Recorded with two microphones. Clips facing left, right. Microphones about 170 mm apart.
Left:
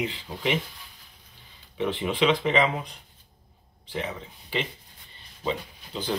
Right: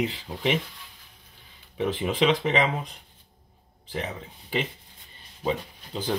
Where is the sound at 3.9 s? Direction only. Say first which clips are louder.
Even; 40° right (ahead or behind).